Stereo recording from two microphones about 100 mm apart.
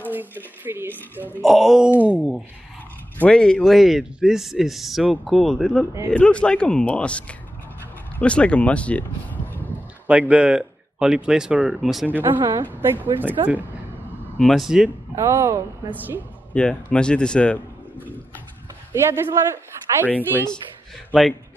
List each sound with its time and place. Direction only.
0.0 s a woman's voice: 20° right (ahead or behind)
1.4 s a man's voice: centre (ahead or behind)
2.0 s speech: 15° right (ahead or behind)
3.2 s a man's voice: 10° left (ahead or behind)
10.0 s speech: 15° right (ahead or behind)
12.1 s a woman's voice: 20° right (ahead or behind)
14.4 s a man's voice: centre (ahead or behind)
15.1 s a woman's voice: 30° right (ahead or behind)
16.5 s a man's voice: 10° left (ahead or behind)
18.9 s a woman's voice: 25° right (ahead or behind)
21.1 s a man's voice: centre (ahead or behind)